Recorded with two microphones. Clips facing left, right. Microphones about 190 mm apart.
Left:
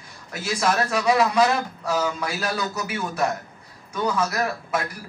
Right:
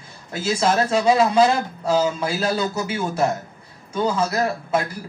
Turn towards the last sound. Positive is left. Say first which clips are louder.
# right 4 dB
turn(degrees=-25)  # may be behind; listen again after turning